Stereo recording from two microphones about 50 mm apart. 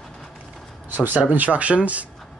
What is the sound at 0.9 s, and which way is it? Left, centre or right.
Speech, right.